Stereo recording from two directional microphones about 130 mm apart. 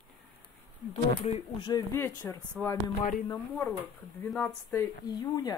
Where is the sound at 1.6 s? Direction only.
30° left (ahead or behind).